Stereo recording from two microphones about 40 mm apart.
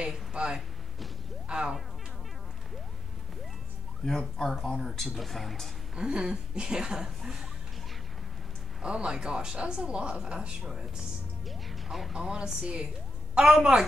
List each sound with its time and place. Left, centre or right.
0.0 s speech: right
4.0 s speech: centre
5.0 s speech: centre
5.9 s speech: right
8.8 s speech: right
11.4 s music: centre
12.1 s a woman's voice: centre